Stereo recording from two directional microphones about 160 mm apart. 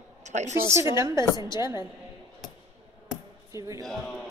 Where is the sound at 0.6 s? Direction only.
15° right (ahead or behind).